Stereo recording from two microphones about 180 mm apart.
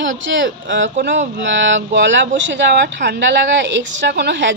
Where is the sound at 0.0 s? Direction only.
90° right.